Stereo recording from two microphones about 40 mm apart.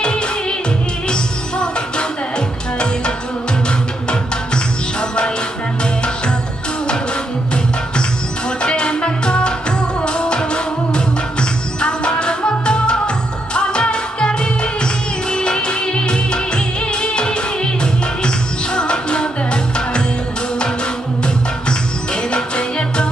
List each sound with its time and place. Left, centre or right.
0.0 s music: left